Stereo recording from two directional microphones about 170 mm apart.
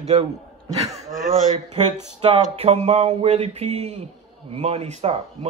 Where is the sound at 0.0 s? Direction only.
40° right (ahead or behind).